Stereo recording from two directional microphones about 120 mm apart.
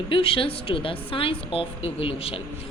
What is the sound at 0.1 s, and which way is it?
A woman's voice, 50° left (ahead or behind).